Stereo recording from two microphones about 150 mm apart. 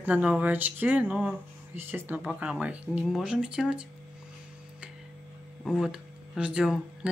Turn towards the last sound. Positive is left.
turn(degrees=-5)  # may be behind; listen again after turning